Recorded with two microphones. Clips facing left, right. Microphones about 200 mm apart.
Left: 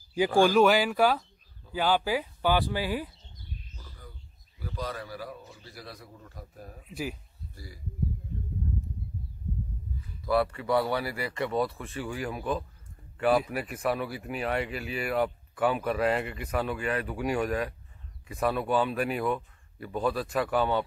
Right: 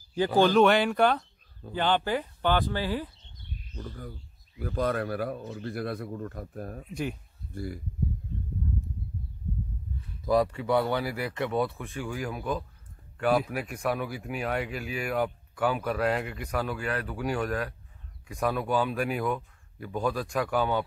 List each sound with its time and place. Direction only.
0.4 s speech: 5° left (ahead or behind)
3.7 s speech: 55° right (ahead or behind)
6.9 s speech: 5° left (ahead or behind)
7.5 s speech: 55° right (ahead or behind)
10.2 s speech: 15° right (ahead or behind)
10.8 s speech: centre (ahead or behind)